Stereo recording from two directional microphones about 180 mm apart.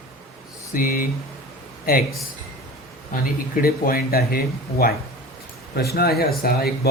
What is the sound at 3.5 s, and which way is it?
Speech, 55° left (ahead or behind).